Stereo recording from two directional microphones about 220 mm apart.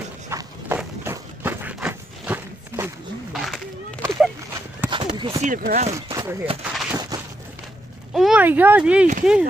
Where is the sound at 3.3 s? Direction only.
Centre (ahead or behind).